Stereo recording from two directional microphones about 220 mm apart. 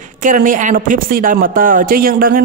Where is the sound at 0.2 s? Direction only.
35° right (ahead or behind).